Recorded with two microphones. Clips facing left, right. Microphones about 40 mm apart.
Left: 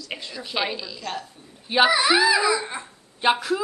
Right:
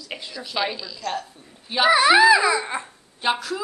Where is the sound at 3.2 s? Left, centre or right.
Centre.